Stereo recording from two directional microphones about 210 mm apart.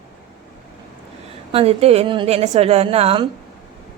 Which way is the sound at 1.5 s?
30° right (ahead or behind).